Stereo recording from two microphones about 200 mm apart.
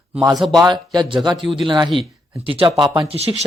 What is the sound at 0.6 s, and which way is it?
Speech, 20° right (ahead or behind).